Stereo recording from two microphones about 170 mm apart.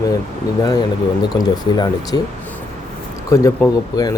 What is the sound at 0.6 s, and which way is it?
Speech, 25° left (ahead or behind).